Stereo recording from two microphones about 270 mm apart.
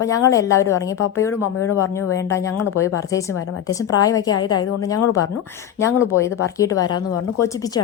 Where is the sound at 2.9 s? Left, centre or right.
Centre.